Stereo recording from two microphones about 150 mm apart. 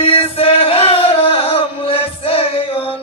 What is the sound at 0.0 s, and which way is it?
Music, 40° left (ahead or behind).